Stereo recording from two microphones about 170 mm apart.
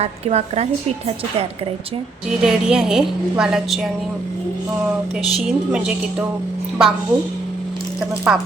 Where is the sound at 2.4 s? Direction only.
5° right (ahead or behind).